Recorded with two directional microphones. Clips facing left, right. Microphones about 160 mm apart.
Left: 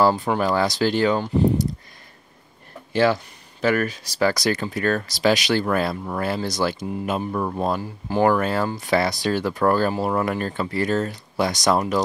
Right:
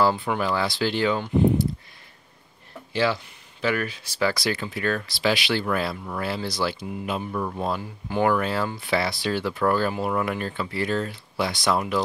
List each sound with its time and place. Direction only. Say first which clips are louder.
0.0 s speech: left 3 dB; 40° left (ahead or behind)
2.9 s speech: left 5 dB; 50° left (ahead or behind)